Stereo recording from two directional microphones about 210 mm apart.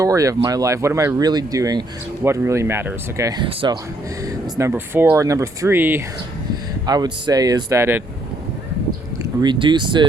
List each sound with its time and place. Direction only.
0.0 s speech: 15° right (ahead or behind)
9.4 s speech: 20° right (ahead or behind)